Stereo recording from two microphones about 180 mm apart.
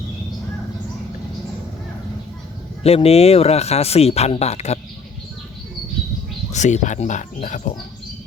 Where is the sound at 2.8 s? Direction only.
35° left (ahead or behind).